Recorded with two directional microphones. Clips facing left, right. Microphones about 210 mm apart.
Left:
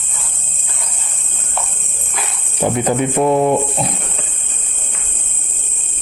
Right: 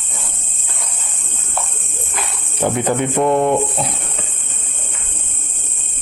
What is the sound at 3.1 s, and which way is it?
Speech, 5° left (ahead or behind).